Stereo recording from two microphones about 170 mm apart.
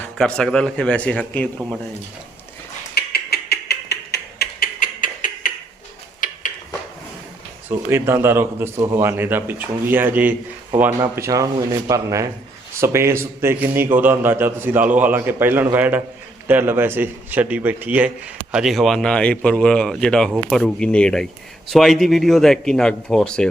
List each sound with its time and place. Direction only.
0.0 s speech: 5° left (ahead or behind)
2.9 s mechanisms: 65° left (ahead or behind)
6.1 s a sound: 50° left (ahead or behind)
7.9 s a man's voice: 15° right (ahead or behind); by 23.5 s 5° left (ahead or behind)